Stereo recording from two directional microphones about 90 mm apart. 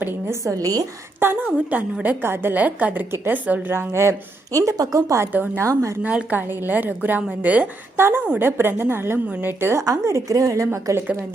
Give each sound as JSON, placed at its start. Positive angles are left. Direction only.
{"t": 0.0, "sound": "a woman's voice", "side_deg": -25}
{"t": 0.4, "sound": "a woman's voice", "side_deg": -40}
{"t": 1.2, "sound": "a woman's voice", "side_deg": -20}
{"t": 4.5, "sound": "a woman's voice", "side_deg": -40}
{"t": 5.3, "sound": "a woman's voice", "side_deg": -20}
{"t": 5.6, "sound": "a woman's voice", "side_deg": -35}
{"t": 6.0, "sound": "a woman's voice", "side_deg": -15}
{"t": 9.8, "sound": "a woman's voice", "side_deg": -35}